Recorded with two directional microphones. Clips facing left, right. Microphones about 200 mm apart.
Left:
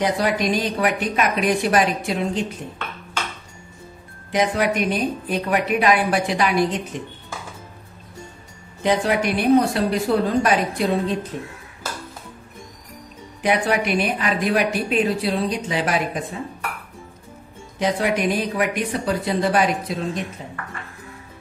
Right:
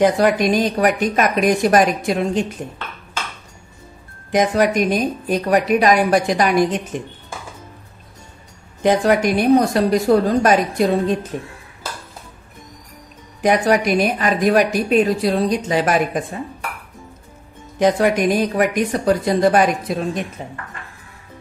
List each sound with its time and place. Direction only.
0.0 s speech: 50° right (ahead or behind)
4.3 s speech: 45° right (ahead or behind)
8.8 s speech: 45° right (ahead or behind)
13.4 s speech: 40° right (ahead or behind)
17.7 s speech: 45° right (ahead or behind)